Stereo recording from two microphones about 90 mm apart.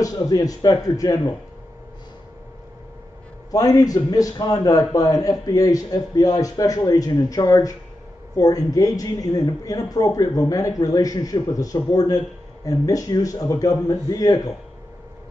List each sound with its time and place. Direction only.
0.0 s a man's voice: 45° left (ahead or behind)
3.5 s a man's voice: 45° left (ahead or behind)